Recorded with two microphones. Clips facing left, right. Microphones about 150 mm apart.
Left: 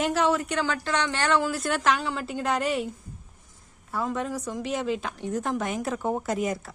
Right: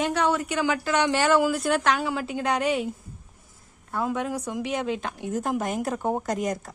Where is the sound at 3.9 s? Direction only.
Centre (ahead or behind).